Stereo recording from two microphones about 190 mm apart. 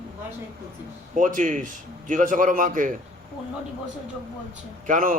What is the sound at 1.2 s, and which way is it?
A man's voice, 45° right (ahead or behind).